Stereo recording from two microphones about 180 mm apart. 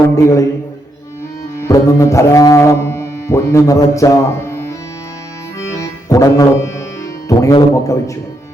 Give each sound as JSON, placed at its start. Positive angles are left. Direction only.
{"t": 0.2, "sound": "speech", "side_deg": 15}
{"t": 1.5, "sound": "music", "side_deg": 15}
{"t": 7.3, "sound": "speech", "side_deg": 15}